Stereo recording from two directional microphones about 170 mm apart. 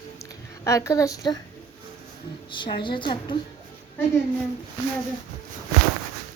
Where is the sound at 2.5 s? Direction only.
30° left (ahead or behind).